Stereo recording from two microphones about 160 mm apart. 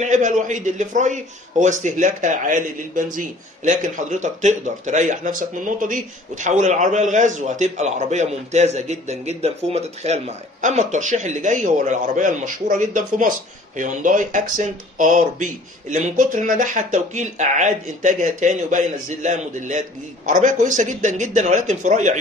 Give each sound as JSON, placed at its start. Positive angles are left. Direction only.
{"t": 0.0, "sound": "speech", "side_deg": -50}